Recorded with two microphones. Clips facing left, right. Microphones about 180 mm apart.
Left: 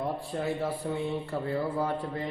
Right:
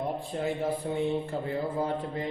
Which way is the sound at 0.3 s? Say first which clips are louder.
Right 2 dB; 20° right (ahead or behind).